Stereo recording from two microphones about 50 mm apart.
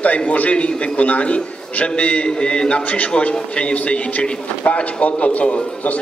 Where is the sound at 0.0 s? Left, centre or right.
Left.